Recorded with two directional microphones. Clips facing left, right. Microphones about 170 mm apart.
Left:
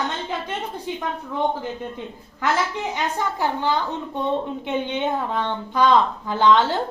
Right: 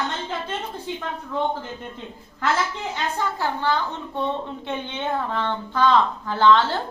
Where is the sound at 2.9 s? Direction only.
15° left (ahead or behind).